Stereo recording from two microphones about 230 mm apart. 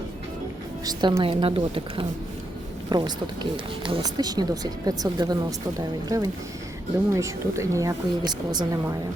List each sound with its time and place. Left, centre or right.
0.9 s a woman's voice: centre